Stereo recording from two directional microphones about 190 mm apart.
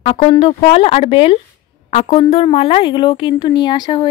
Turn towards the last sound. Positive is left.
turn(degrees=20)  # may be behind; listen again after turning